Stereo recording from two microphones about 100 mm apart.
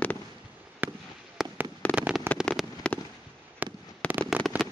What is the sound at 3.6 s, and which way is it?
Fireworks, 20° right (ahead or behind).